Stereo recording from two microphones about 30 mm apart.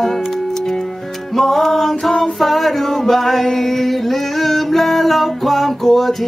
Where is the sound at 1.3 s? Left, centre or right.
Centre.